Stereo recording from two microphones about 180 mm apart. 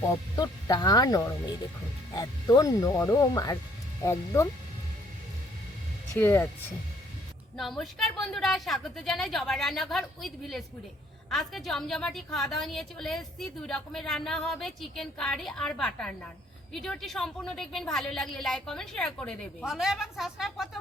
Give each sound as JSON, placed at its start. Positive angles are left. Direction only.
{"t": 0.3, "sound": "speech", "side_deg": 20}
{"t": 6.1, "sound": "speech", "side_deg": 10}
{"t": 7.5, "sound": "a woman's voice", "side_deg": 0}